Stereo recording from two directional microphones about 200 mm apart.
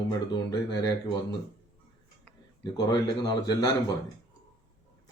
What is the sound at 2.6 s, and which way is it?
Speech, 20° left (ahead or behind).